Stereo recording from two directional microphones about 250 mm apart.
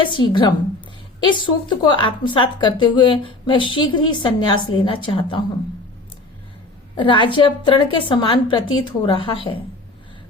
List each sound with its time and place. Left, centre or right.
0.0 s a woman's voice: centre
6.9 s a woman's voice: centre